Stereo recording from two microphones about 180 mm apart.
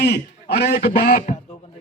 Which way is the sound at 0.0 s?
65° left (ahead or behind).